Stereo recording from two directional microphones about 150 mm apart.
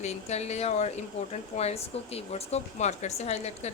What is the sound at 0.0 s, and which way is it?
A woman's voice, 45° left (ahead or behind).